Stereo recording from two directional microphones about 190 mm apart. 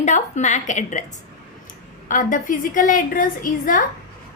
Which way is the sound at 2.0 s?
45° left (ahead or behind).